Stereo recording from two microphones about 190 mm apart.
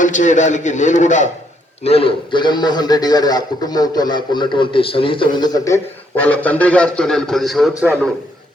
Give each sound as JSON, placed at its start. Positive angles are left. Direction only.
{"t": 0.0, "sound": "a man's voice", "side_deg": 40}